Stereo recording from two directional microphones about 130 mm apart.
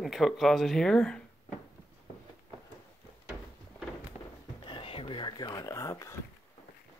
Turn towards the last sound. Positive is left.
turn(degrees=25)  # may be behind; listen again after turning